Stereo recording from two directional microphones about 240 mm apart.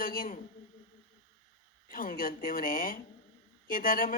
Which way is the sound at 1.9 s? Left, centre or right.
Left.